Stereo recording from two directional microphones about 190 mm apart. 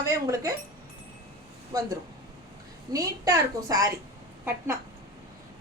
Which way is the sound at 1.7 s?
20° right (ahead or behind).